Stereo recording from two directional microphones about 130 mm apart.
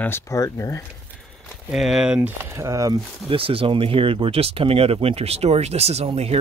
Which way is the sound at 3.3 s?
45° right (ahead or behind).